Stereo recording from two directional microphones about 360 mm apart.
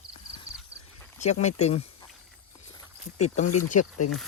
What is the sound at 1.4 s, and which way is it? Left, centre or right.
Speech, centre.